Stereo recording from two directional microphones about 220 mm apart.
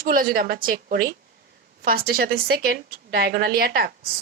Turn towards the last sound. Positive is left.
turn(degrees=-45)  # may be behind; listen again after turning